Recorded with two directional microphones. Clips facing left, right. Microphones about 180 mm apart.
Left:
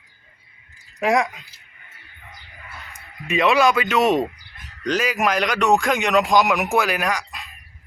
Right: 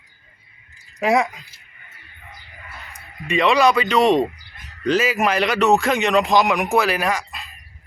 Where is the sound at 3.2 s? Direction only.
5° left (ahead or behind).